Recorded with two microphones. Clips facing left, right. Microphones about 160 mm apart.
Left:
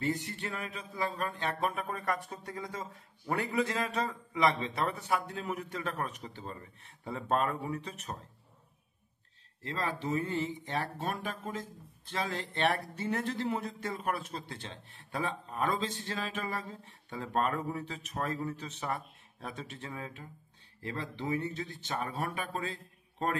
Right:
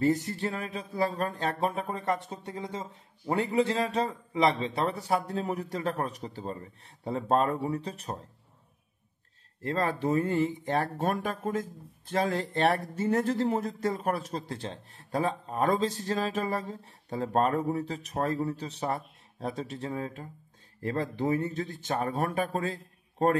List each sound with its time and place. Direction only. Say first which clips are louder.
0.0 s music: right 8 dB; 40° right (ahead or behind)
9.6 s speech: right 7 dB; 50° right (ahead or behind)
12.1 s music: right 8 dB; 45° right (ahead or behind)
20.8 s speech: right 8 dB; 45° right (ahead or behind)